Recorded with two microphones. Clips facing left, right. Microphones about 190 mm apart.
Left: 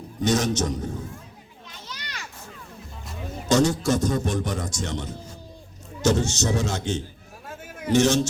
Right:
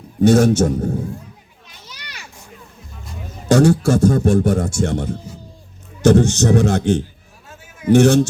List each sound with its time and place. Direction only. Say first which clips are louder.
0.2 s a man's voice: right 10 dB; 50° right (ahead or behind)
1.9 s children playing: left 2 dB; 10° right (ahead or behind)
3.5 s a man's voice: right 7 dB; 55° right (ahead or behind)
6.3 s a man's voice: right 10 dB; 60° right (ahead or behind)
7.4 s a sound: left 3 dB; 55° left (ahead or behind)
7.9 s a man's voice: right 8 dB; 60° right (ahead or behind)